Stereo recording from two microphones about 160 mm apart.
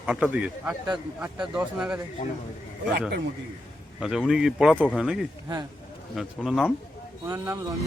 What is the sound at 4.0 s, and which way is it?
Speech, centre (ahead or behind).